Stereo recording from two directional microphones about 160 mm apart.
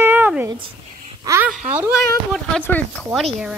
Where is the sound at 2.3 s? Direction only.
10° left (ahead or behind).